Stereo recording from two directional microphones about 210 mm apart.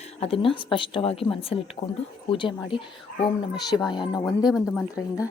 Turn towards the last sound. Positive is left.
turn(degrees=0)  # may be behind; listen again after turning